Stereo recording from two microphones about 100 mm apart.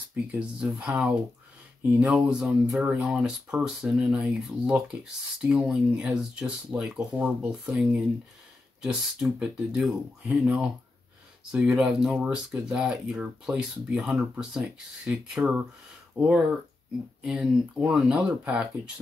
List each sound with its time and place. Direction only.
0.1 s speech: 15° right (ahead or behind)